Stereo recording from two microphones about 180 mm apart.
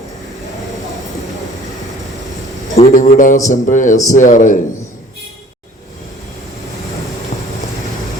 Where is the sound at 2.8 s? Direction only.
45° left (ahead or behind).